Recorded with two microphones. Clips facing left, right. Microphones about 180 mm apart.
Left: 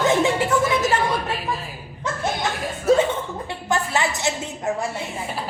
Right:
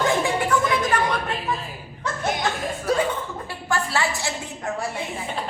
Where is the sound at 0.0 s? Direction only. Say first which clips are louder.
Left 3 dB; 25° left (ahead or behind).